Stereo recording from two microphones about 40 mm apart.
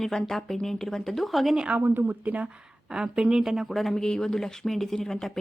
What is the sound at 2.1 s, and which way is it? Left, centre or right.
Speech, right.